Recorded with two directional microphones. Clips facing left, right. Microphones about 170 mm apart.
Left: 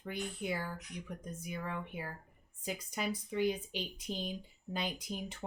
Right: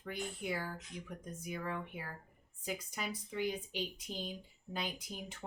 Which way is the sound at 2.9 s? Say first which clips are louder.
Left 5 dB; 20° left (ahead or behind).